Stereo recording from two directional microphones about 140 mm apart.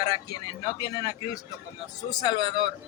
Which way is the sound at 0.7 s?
25° left (ahead or behind).